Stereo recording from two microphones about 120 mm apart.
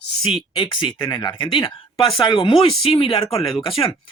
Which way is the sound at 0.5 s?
45° left (ahead or behind).